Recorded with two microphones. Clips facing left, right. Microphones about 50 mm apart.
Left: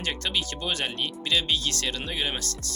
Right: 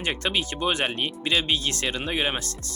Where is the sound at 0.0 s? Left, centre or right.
Right.